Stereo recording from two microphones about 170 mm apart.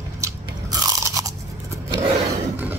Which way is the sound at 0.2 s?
20° right (ahead or behind).